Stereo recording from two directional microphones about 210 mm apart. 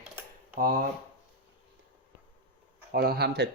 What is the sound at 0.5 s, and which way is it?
Speech, 40° right (ahead or behind).